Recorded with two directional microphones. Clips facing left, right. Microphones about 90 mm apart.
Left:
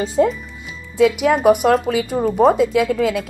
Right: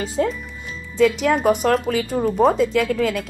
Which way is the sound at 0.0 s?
25° left (ahead or behind).